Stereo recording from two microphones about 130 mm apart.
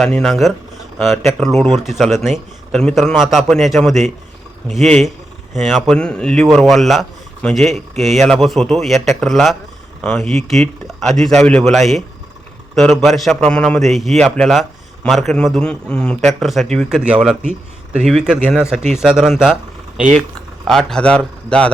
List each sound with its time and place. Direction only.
0.0 s speech: centre (ahead or behind)
20.7 s a man's voice: 5° left (ahead or behind)